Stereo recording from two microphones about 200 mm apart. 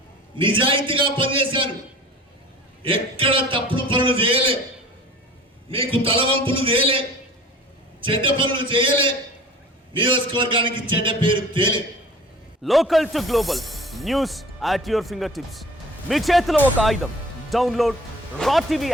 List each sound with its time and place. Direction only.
0.3 s a man's voice: 25° right (ahead or behind)
2.8 s a man's voice: 25° right (ahead or behind)
5.6 s a man's voice: 25° right (ahead or behind)
8.0 s a man's voice: 25° right (ahead or behind)
12.6 s speech: centre (ahead or behind)